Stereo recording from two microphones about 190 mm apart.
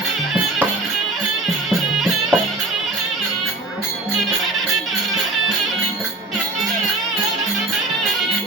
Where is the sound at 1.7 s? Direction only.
Centre (ahead or behind).